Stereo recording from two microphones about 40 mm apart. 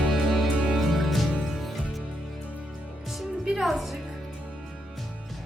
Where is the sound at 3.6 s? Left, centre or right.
Centre.